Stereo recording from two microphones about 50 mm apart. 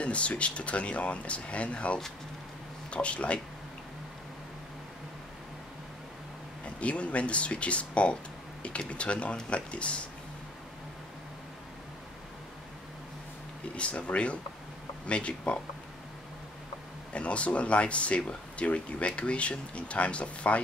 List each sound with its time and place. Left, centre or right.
0.0 s speech: left
6.8 s speech: left
13.7 s speech: left
17.1 s speech: left